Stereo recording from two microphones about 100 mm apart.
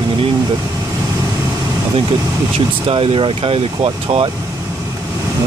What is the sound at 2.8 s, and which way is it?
Speech, 70° right (ahead or behind).